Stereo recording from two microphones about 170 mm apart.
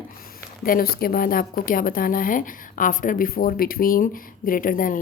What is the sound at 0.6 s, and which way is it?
A woman's voice, 60° left (ahead or behind).